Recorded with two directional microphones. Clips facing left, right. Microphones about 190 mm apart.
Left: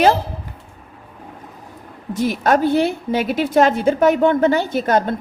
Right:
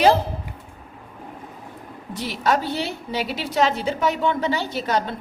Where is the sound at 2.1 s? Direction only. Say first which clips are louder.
Left 6 dB; 50° left (ahead or behind).